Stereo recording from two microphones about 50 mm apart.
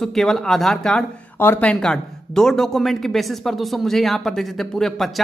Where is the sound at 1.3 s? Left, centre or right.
Left.